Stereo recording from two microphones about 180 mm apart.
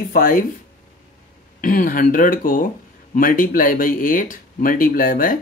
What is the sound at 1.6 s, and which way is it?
Speech, 50° left (ahead or behind).